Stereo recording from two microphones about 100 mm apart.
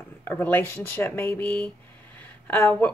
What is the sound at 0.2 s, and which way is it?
A woman's voice, 20° left (ahead or behind).